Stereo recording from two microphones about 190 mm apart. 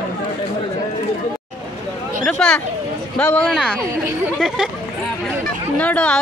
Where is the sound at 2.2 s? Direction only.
5° left (ahead or behind).